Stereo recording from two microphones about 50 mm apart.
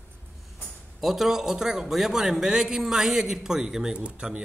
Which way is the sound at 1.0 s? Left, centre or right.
Centre.